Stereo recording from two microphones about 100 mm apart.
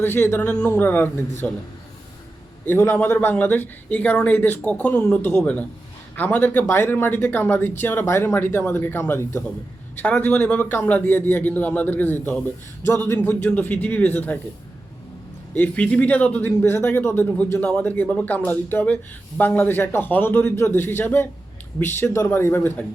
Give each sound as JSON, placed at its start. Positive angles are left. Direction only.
{"t": 0.0, "sound": "a man's voice", "side_deg": 20}
{"t": 2.6, "sound": "a man's voice", "side_deg": 25}
{"t": 15.5, "sound": "speech", "side_deg": 15}